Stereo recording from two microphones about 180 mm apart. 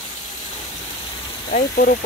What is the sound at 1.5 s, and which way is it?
Speech, 50° left (ahead or behind).